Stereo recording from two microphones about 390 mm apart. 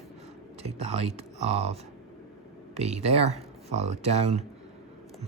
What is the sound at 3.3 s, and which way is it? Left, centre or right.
Speech, centre.